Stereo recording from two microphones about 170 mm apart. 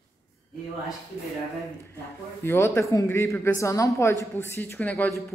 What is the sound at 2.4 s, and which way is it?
A woman's voice, 15° left (ahead or behind).